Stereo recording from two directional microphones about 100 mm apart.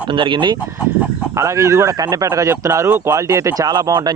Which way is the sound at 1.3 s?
30° right (ahead or behind).